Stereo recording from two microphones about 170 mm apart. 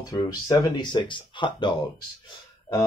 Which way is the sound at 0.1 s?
25° left (ahead or behind).